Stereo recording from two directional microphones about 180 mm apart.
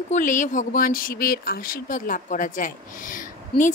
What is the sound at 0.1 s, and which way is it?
Speech, 45° left (ahead or behind).